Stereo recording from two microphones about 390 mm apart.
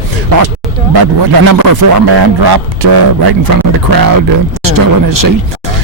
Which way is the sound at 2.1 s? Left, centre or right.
Right.